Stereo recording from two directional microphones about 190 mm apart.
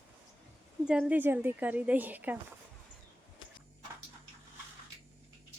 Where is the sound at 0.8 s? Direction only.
5° right (ahead or behind).